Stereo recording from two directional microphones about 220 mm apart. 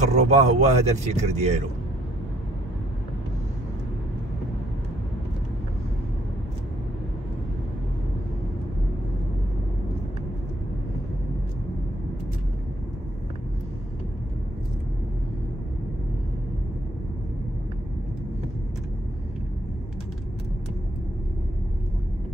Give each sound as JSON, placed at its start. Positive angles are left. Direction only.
{"t": 0.1, "sound": "a man's voice", "side_deg": -30}